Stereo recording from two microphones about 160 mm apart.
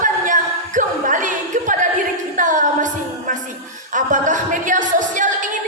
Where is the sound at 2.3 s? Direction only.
55° right (ahead or behind).